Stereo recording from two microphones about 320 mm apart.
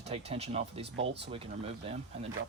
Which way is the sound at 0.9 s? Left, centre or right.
Right.